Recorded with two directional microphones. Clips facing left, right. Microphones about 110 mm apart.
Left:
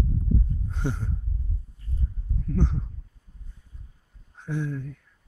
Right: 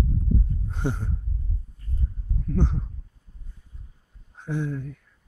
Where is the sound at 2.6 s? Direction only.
15° right (ahead or behind).